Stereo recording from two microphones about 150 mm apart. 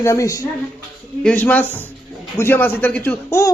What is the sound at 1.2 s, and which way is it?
Speech, 10° left (ahead or behind).